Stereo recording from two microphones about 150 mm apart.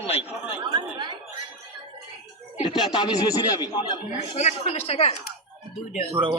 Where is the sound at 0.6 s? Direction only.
30° right (ahead or behind).